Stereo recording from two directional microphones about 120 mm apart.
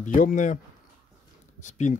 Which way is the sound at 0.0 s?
90° left.